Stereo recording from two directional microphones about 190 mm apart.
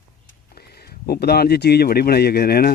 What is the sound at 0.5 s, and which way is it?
Speech, 55° left (ahead or behind).